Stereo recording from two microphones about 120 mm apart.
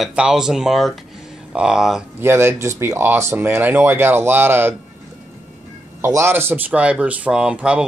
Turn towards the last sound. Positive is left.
turn(degrees=-10)  # may be behind; listen again after turning